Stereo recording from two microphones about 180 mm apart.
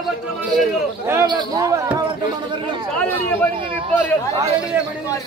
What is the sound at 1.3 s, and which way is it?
Speech, 20° right (ahead or behind).